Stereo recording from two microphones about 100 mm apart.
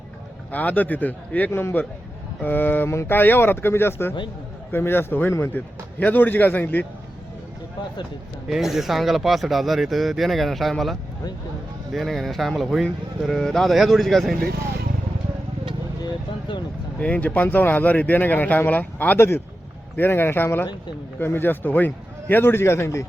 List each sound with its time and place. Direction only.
0.5 s a man's voice: 15° left (ahead or behind)
8.4 s speech: 5° right (ahead or behind)
17.0 s a man's voice: 15° left (ahead or behind)